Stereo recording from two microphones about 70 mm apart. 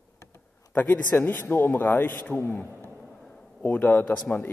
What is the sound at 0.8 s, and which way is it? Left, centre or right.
A man's voice, left.